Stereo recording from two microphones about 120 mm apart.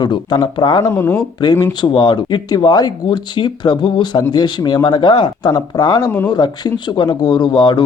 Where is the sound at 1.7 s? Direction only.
35° left (ahead or behind).